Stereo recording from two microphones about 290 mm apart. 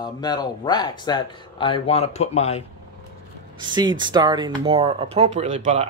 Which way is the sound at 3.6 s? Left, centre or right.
Centre.